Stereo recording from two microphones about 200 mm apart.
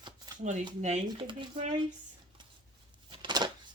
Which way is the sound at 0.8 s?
35° right (ahead or behind).